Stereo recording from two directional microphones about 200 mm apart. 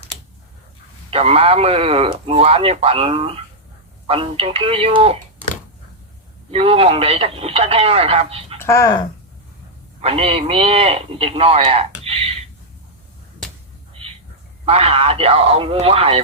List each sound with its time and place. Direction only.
1.1 s a man's voice: 30° right (ahead or behind)
6.5 s a man's voice: 30° right (ahead or behind)
8.6 s speech: 15° left (ahead or behind)
10.0 s a man's voice: 30° right (ahead or behind)
12.0 s a sound: 30° right (ahead or behind)
14.6 s a man's voice: 30° right (ahead or behind)